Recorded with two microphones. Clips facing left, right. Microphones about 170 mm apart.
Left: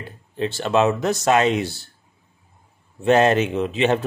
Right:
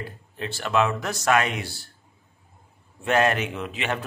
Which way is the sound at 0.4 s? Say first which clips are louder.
Left 5 dB; 25° left (ahead or behind).